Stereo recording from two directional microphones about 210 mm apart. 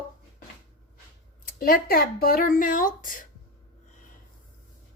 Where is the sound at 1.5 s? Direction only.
45° left (ahead or behind).